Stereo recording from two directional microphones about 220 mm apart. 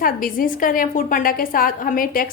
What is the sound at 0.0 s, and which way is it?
A woman's voice, 40° left (ahead or behind).